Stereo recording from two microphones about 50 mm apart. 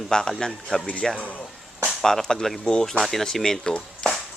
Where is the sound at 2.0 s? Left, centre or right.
Centre.